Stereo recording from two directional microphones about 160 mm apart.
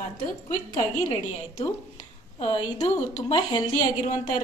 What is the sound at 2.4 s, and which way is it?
Speech, 35° left (ahead or behind).